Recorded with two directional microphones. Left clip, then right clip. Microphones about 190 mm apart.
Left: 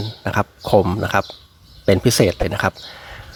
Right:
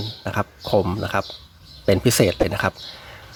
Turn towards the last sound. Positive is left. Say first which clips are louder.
# left 2 dB
turn(degrees=15)  # may be behind; listen again after turning